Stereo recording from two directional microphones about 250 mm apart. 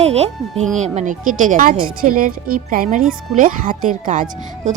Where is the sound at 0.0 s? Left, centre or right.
Right.